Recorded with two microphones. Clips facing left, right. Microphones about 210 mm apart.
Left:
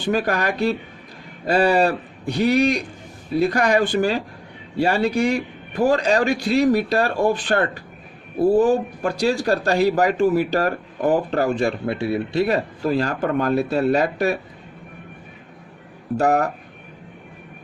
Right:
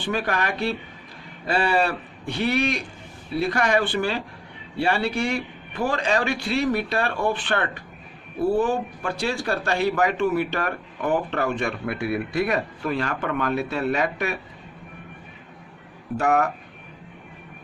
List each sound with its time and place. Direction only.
0.0 s speech: 40° left (ahead or behind)
16.1 s speech: 35° left (ahead or behind)